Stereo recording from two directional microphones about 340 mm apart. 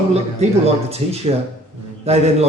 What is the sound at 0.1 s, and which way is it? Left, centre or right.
A man's voice, centre.